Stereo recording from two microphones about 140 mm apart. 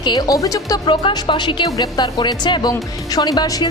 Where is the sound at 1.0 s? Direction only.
35° left (ahead or behind).